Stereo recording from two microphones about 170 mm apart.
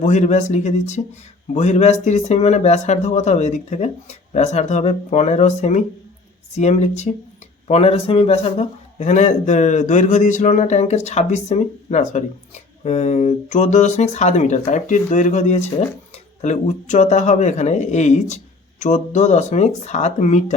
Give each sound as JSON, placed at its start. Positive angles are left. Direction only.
{"t": 0.0, "sound": "speech", "side_deg": 45}